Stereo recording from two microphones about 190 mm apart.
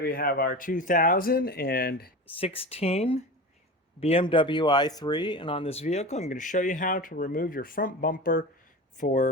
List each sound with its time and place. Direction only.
0.0 s speech: 50° left (ahead or behind)
2.4 s speech: 30° left (ahead or behind)